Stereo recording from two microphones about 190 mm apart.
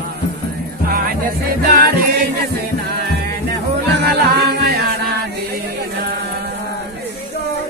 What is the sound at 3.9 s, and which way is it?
Music, 60° right (ahead or behind).